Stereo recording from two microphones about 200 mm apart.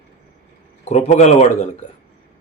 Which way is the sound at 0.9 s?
35° left (ahead or behind).